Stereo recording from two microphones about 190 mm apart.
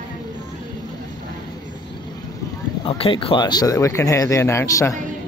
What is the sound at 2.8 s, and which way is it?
Speech, 30° left (ahead or behind).